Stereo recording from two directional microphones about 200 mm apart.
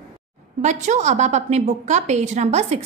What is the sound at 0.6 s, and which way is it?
A woman's voice, 35° right (ahead or behind).